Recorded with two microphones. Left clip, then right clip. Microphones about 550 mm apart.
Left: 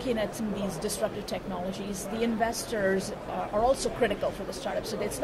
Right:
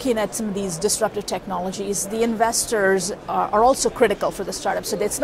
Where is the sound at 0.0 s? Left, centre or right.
Right.